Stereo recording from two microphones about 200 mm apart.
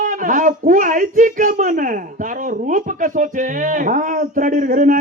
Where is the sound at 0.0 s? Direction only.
40° right (ahead or behind).